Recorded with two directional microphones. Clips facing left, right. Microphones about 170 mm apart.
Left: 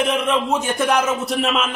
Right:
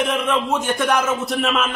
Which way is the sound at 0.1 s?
5° left (ahead or behind).